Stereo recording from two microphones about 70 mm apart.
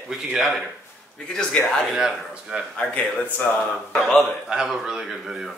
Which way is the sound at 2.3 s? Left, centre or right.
Centre.